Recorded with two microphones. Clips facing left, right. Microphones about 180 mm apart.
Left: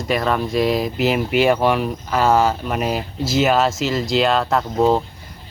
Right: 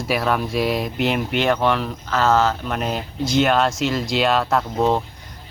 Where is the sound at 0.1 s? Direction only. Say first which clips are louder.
Left 2 dB; centre (ahead or behind).